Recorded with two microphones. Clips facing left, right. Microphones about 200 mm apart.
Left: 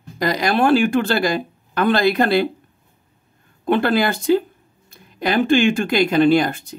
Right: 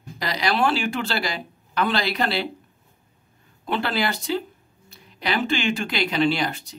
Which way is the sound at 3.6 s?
50° left (ahead or behind).